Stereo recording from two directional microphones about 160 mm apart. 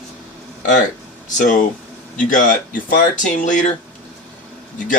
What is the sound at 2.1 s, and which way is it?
Speech, 55° left (ahead or behind).